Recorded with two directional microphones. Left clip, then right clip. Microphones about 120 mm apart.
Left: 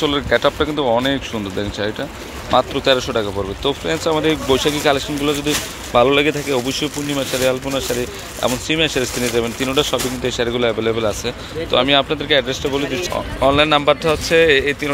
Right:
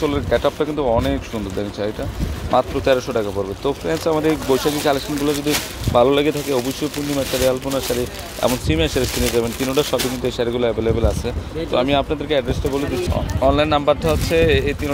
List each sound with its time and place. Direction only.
0.0 s speech: centre (ahead or behind)
5.9 s speech: 15° right (ahead or behind)
8.4 s speech: 25° right (ahead or behind); by 14.8 s centre (ahead or behind)